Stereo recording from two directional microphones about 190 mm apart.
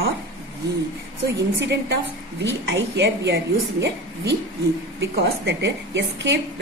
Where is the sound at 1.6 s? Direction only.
65° right (ahead or behind).